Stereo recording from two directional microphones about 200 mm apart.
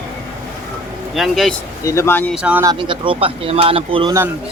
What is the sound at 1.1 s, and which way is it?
Speech, centre (ahead or behind).